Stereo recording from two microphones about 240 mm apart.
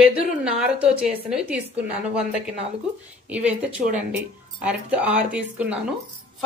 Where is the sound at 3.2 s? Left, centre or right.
Centre.